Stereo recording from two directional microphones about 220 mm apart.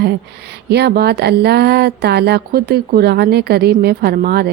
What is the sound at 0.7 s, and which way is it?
Speech, 50° right (ahead or behind).